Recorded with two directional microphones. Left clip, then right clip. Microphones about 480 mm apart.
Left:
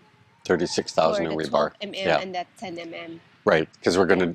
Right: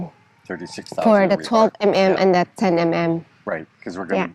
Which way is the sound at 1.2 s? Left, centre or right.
Right.